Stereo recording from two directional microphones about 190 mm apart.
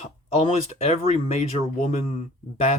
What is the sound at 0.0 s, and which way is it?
Speech, 35° left (ahead or behind).